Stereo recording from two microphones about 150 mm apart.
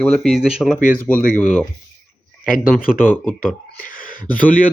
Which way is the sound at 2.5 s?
70° left (ahead or behind).